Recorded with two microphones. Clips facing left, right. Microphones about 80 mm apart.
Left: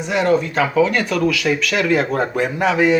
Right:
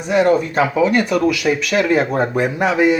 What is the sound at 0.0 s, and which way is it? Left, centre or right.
Speech, centre.